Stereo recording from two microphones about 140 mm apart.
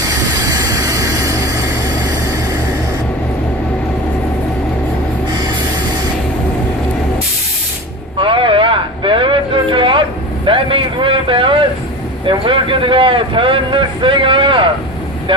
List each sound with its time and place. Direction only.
0.4 s vehicle: 25° right (ahead or behind)
8.2 s vehicle: 35° right (ahead or behind)
12.2 s speech: 35° right (ahead or behind)